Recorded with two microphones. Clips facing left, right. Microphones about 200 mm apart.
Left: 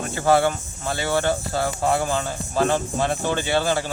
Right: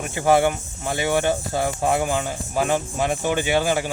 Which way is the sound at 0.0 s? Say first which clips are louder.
Right 1 dB; 15° right (ahead or behind).